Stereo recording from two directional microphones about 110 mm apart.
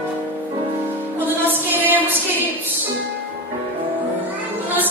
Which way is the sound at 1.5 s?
15° right (ahead or behind).